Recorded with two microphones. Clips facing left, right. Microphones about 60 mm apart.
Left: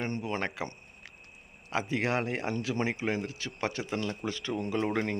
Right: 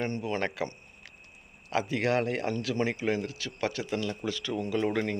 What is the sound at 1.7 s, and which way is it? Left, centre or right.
Speech, left.